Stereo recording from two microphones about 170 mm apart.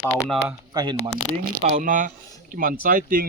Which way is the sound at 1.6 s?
50° right (ahead or behind).